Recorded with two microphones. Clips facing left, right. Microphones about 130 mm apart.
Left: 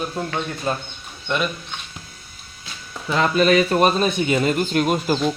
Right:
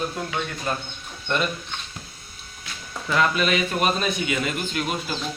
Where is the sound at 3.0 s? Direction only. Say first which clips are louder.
Left 4 dB; 30° left (ahead or behind).